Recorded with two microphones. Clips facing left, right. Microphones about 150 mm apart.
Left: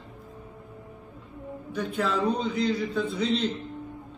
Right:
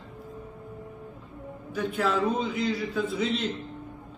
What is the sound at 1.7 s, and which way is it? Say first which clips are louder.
A man's voice: right 1 dB; centre (ahead or behind).